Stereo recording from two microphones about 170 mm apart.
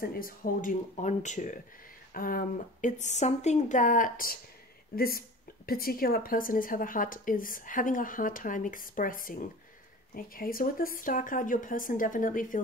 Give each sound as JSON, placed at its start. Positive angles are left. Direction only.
{"t": 0.0, "sound": "speech", "side_deg": 60}